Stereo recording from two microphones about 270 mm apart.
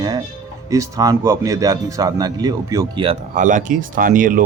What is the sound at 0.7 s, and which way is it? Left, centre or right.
Speech, centre.